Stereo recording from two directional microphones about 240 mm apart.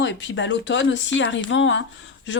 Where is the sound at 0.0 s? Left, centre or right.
Left.